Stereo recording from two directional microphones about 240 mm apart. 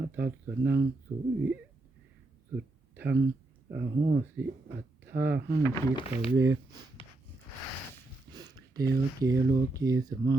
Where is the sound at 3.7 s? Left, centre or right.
Right.